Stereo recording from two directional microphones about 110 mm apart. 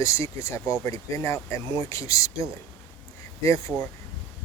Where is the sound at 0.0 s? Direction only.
25° left (ahead or behind).